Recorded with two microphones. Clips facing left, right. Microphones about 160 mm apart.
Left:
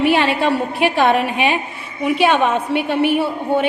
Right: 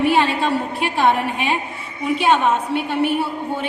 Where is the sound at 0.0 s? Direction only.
75° left (ahead or behind).